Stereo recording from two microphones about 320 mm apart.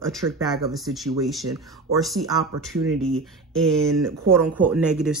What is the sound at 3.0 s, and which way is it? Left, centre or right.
Speech, centre.